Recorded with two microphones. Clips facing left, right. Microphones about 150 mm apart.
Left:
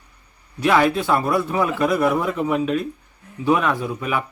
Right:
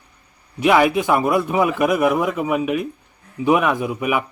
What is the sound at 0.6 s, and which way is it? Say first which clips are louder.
Speech: right 2 dB; 15° right (ahead or behind).